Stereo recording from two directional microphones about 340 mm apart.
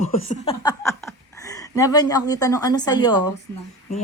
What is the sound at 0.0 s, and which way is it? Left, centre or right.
Speech, centre.